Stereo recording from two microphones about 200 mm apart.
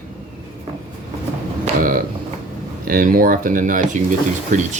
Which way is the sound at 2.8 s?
45° right (ahead or behind).